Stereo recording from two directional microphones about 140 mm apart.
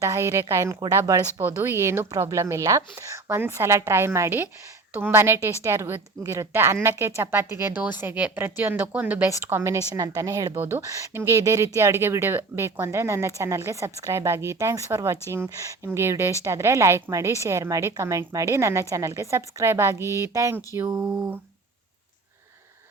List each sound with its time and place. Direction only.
0.0 s a woman's voice: 20° right (ahead or behind)